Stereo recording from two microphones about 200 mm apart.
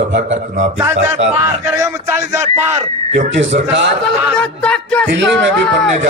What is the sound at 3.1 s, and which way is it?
Speech, 60° right (ahead or behind).